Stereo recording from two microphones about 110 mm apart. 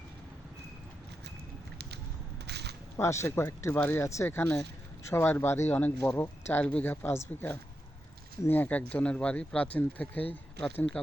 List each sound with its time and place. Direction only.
3.0 s speech: 25° left (ahead or behind)